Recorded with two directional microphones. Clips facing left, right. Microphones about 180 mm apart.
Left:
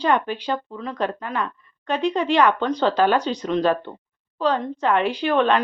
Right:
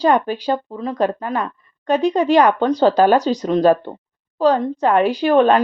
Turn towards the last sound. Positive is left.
turn(degrees=-40)  # may be behind; listen again after turning